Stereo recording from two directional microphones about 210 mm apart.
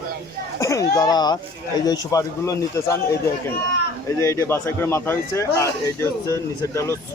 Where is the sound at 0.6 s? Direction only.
15° left (ahead or behind).